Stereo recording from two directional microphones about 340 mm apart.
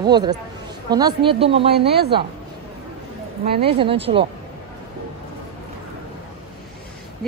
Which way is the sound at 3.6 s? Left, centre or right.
Centre.